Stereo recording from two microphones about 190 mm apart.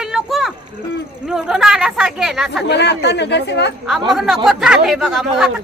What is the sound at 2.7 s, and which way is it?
A man's voice, 65° left (ahead or behind).